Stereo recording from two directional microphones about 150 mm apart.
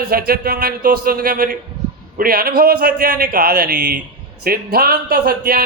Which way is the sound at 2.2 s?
85° right.